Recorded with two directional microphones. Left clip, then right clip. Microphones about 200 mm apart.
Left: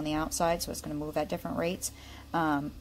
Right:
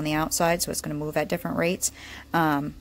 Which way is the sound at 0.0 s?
25° right (ahead or behind).